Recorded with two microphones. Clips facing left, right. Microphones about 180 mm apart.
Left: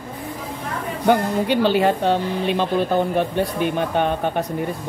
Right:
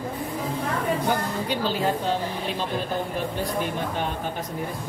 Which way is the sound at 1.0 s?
70° left (ahead or behind).